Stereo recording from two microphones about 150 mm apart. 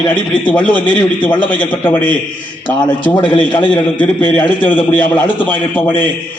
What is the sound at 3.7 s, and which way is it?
A man's voice, 10° left (ahead or behind).